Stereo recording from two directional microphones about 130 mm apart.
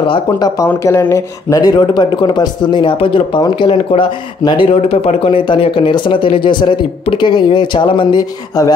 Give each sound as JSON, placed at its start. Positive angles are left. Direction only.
{"t": 0.8, "sound": "speech", "side_deg": 20}